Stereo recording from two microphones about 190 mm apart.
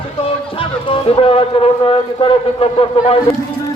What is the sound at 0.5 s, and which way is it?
Speech, 30° left (ahead or behind).